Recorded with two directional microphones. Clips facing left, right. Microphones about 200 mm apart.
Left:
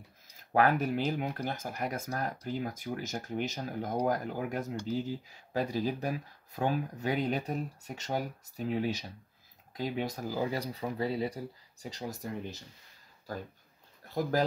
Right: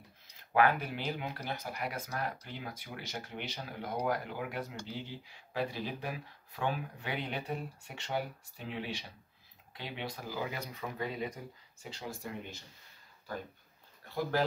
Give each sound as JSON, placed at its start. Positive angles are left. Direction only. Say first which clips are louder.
{"t": 0.5, "sound": "speech", "louder": "left 2 dB", "side_deg": 40}